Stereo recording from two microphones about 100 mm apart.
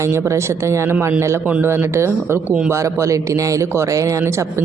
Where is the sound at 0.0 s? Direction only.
30° right (ahead or behind).